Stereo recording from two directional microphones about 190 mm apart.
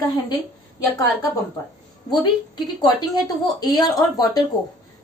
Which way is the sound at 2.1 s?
20° left (ahead or behind).